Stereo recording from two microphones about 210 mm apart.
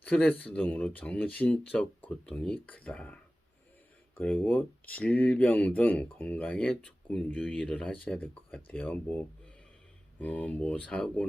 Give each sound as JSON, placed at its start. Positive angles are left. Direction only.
{"t": 0.0, "sound": "speech", "side_deg": 5}
{"t": 4.2, "sound": "speech", "side_deg": 10}